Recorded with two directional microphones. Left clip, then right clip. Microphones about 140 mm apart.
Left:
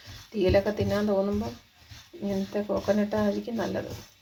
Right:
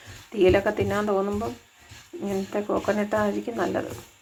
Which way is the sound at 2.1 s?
15° right (ahead or behind).